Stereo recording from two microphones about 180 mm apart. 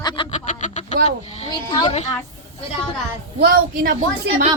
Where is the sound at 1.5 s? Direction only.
25° left (ahead or behind).